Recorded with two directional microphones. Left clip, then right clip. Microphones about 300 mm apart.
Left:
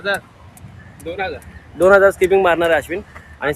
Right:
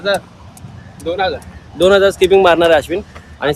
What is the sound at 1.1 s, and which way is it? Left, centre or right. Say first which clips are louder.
Speech: right 7 dB; centre.